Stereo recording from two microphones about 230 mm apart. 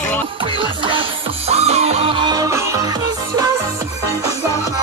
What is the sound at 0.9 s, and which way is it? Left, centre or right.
Music, right.